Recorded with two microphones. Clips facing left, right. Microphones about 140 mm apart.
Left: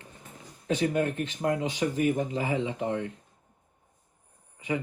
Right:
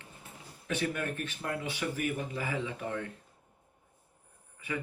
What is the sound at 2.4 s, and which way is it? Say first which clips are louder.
Speech: left 6 dB; 20° left (ahead or behind).